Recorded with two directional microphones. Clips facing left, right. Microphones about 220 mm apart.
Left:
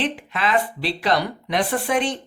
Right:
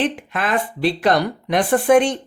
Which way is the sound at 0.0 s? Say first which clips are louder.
Right 2 dB; 50° right (ahead or behind).